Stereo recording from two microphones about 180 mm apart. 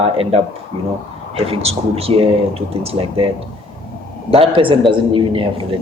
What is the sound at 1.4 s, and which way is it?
A man's voice, 35° right (ahead or behind).